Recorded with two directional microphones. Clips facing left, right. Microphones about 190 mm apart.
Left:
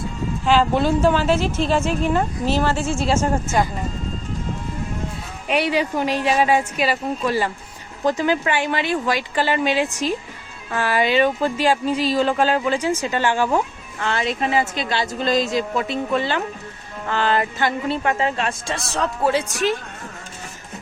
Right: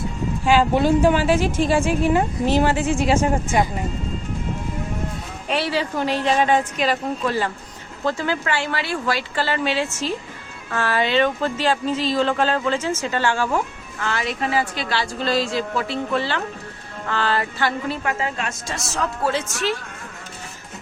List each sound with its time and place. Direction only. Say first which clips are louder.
0.4 s a woman's voice: right 1 dB; 15° right (ahead or behind)
5.5 s speech: left 3 dB; 15° left (ahead or behind)
19.2 s speech: left 4 dB; 15° left (ahead or behind)